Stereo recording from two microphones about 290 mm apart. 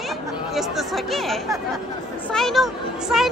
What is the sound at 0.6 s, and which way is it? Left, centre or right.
A woman's voice, centre.